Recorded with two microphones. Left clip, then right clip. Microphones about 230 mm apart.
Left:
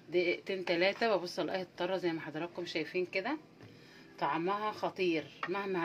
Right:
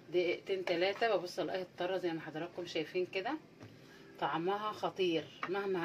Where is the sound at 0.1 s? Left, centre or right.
Left.